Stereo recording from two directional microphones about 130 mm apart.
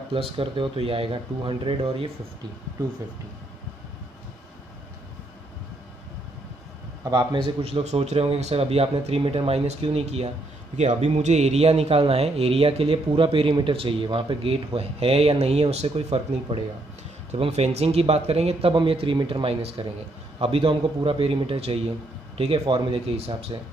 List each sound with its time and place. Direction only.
0.1 s speech: 45° right (ahead or behind)
7.1 s speech: 40° right (ahead or behind)
7.8 s speech: 60° right (ahead or behind)